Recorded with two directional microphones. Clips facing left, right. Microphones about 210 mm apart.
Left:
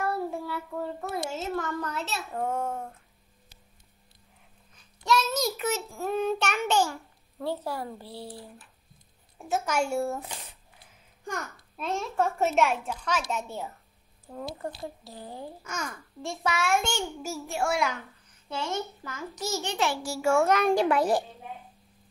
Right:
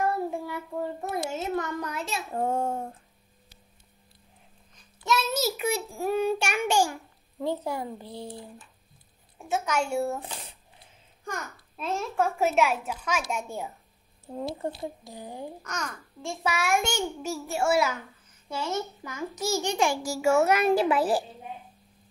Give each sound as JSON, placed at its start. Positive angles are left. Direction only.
{"t": 0.0, "sound": "child singing", "side_deg": -15}
{"t": 2.3, "sound": "speech", "side_deg": -30}
{"t": 5.0, "sound": "a child's voice", "side_deg": -5}
{"t": 9.4, "sound": "a child's voice", "side_deg": 5}
{"t": 11.7, "sound": "a child's voice", "side_deg": 0}
{"t": 14.2, "sound": "speech", "side_deg": -25}
{"t": 15.6, "sound": "a child's voice", "side_deg": 5}
{"t": 16.4, "sound": "a child's voice", "side_deg": -10}